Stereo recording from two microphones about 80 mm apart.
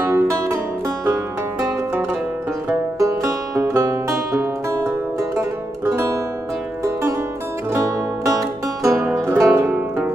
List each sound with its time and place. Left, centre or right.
0.1 s music: right
3.0 s music: right
7.7 s music: right
9.0 s music: right